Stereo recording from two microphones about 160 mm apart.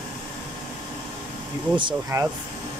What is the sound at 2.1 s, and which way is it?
Speech, 20° right (ahead or behind).